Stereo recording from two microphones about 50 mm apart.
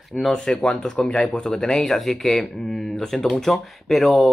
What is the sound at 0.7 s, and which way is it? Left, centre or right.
Speech, left.